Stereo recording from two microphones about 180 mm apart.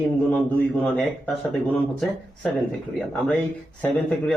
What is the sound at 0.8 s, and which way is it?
Speech, 10° left (ahead or behind).